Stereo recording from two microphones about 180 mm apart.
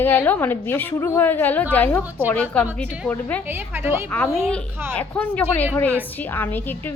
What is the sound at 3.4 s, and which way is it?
Speech, 10° right (ahead or behind).